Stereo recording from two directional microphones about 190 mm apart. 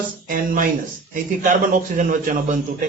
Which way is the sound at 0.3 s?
45° right (ahead or behind).